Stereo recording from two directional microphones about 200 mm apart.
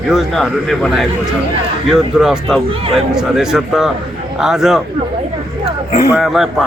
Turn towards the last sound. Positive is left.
turn(degrees=0)  # may be behind; listen again after turning